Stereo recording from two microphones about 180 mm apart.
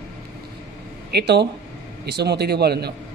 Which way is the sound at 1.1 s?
70° right (ahead or behind).